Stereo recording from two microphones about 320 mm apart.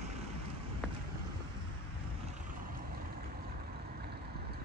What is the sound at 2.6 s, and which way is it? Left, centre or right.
Vehicle, right.